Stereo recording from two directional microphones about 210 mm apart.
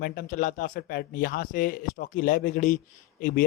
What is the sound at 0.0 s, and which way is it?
Speech, 40° left (ahead or behind).